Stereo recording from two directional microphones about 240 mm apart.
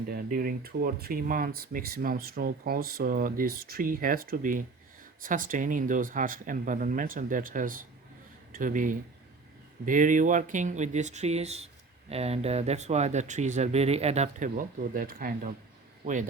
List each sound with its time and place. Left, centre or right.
0.1 s speech: right